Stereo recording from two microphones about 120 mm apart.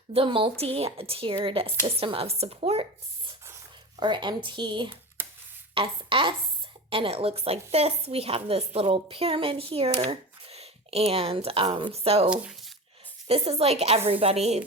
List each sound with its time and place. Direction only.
0.3 s a woman's voice: 45° right (ahead or behind)
4.0 s a woman's voice: 40° right (ahead or behind); by 12.3 s 55° right (ahead or behind)
12.3 s speech: 10° right (ahead or behind)
13.2 s a woman's voice: 55° right (ahead or behind)